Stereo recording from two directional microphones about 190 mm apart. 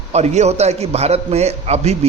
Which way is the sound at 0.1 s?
35° right (ahead or behind).